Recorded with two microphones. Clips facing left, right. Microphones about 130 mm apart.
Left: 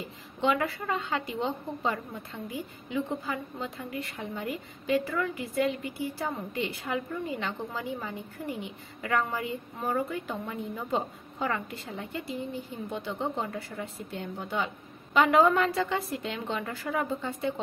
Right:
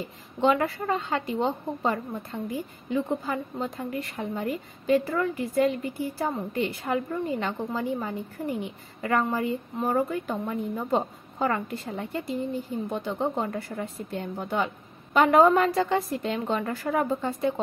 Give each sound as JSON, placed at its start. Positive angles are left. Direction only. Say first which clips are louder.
{"t": 0.4, "sound": "a woman's voice", "louder": "right 4 dB", "side_deg": -40}